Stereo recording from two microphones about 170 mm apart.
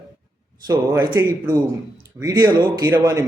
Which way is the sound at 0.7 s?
20° right (ahead or behind).